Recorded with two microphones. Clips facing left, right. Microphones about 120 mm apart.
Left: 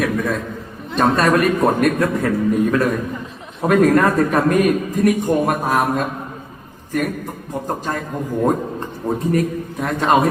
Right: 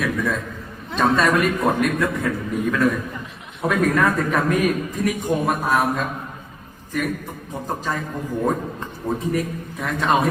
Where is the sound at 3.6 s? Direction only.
40° left (ahead or behind).